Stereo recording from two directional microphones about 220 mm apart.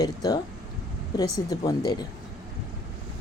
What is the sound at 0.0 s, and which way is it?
Speech, 15° left (ahead or behind).